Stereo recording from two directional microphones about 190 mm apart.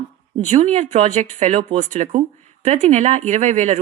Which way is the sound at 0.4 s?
40° right (ahead or behind).